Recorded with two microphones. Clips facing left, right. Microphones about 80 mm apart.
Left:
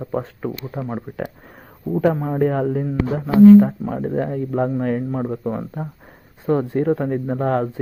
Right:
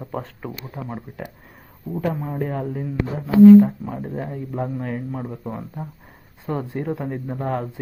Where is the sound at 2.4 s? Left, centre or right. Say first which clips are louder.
Left 9 dB; left.